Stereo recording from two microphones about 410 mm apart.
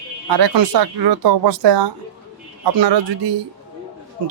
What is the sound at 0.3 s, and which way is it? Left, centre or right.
Speech, right.